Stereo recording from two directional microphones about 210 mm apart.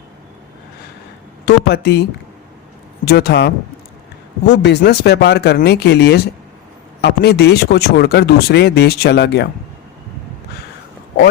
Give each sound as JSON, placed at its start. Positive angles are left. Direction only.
{"t": 1.5, "sound": "speech", "side_deg": 50}
{"t": 3.1, "sound": "speech", "side_deg": 50}